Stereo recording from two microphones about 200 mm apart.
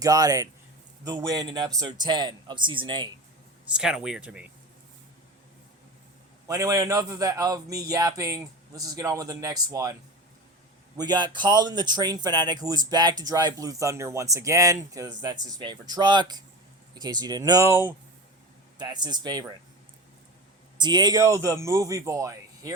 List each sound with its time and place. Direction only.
0.0 s speech: 20° right (ahead or behind)
3.7 s speech: 5° right (ahead or behind)
6.5 s speech: 15° right (ahead or behind)
10.9 s speech: 20° right (ahead or behind)
20.7 s speech: 20° right (ahead or behind)